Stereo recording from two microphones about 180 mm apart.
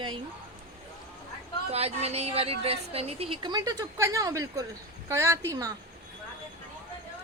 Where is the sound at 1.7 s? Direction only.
35° right (ahead or behind); by 5.7 s 20° right (ahead or behind).